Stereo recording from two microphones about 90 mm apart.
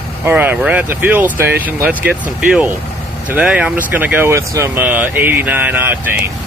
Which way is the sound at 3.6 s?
15° right (ahead or behind).